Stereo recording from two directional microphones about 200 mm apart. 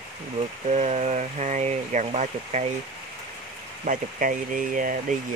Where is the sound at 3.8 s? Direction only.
40° right (ahead or behind).